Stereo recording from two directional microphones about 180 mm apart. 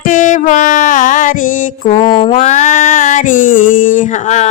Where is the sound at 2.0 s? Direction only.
25° left (ahead or behind).